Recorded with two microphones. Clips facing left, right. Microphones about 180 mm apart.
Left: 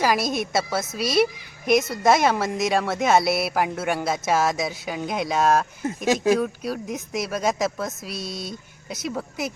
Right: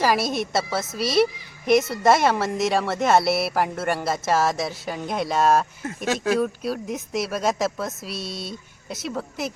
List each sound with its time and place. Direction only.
0.0 s a woman's voice: 5° right (ahead or behind)
8.1 s speech: 45° left (ahead or behind)
8.9 s a woman's voice: centre (ahead or behind)